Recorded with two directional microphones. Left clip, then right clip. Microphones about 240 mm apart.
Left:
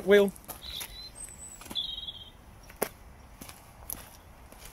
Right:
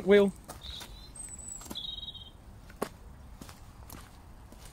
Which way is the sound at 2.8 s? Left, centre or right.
Centre.